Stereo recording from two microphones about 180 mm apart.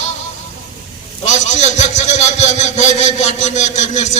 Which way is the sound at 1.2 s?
40° left (ahead or behind).